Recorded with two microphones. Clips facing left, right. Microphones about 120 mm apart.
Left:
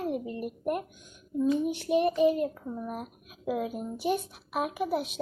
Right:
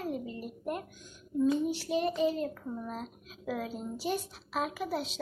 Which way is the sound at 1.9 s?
15° left (ahead or behind).